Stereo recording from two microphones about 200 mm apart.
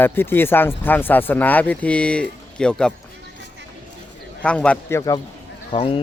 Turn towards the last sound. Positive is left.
turn(degrees=25)  # may be behind; listen again after turning